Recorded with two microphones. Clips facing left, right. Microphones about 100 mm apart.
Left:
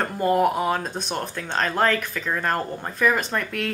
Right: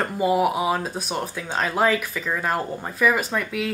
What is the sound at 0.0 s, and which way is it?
Speech, 5° right (ahead or behind).